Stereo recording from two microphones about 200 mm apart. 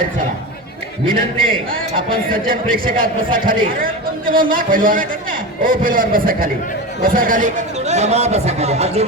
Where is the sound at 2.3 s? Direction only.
45° right (ahead or behind).